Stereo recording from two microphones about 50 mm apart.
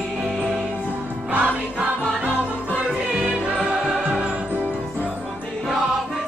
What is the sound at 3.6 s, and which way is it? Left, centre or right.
Music, right.